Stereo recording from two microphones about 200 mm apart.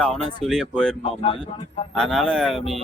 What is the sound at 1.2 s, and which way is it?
Speech, 25° left (ahead or behind).